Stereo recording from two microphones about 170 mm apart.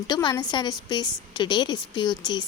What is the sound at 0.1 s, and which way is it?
A woman's voice, 25° left (ahead or behind).